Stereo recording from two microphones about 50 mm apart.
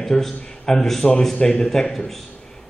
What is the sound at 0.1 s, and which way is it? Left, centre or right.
Speech, centre.